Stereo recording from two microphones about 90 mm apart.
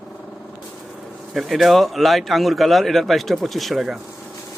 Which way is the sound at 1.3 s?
Centre (ahead or behind).